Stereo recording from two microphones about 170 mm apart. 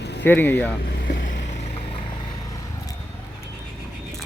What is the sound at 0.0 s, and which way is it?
Vehicle, 85° left.